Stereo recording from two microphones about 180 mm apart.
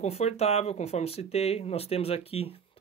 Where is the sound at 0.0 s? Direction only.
35° left (ahead or behind).